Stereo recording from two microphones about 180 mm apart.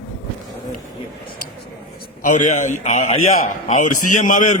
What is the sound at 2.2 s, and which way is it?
A man's voice, 45° left (ahead or behind).